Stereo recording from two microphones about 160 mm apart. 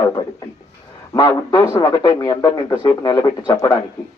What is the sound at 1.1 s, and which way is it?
A man's voice, 20° left (ahead or behind).